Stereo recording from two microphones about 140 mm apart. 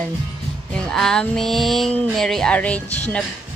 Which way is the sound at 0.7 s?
5° left (ahead or behind).